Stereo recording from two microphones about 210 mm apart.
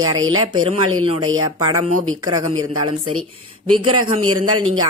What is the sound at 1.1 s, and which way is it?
Speech, 75° right (ahead or behind).